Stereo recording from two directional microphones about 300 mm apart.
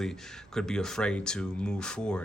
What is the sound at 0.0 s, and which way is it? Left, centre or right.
Speech, centre.